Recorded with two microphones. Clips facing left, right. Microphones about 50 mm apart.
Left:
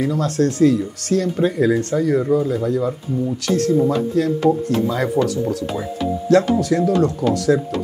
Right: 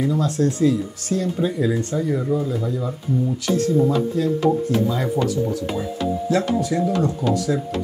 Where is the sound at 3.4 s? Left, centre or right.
Left.